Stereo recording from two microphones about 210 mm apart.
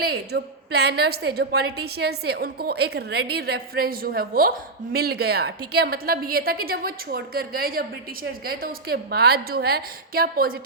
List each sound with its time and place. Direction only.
0.0 s a woman's voice: 50° right (ahead or behind)